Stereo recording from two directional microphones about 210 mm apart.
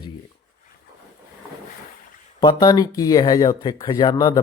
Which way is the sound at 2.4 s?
20° left (ahead or behind).